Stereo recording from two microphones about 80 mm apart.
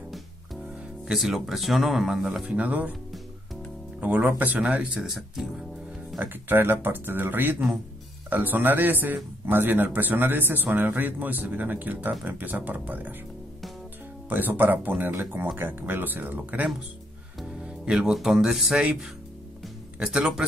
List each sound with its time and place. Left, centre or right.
0.1 s music: centre
2.4 s speech: centre
4.0 s speech: centre
6.1 s a man's voice: right
14.3 s a man's voice: right; by 18.9 s centre
20.0 s speech: centre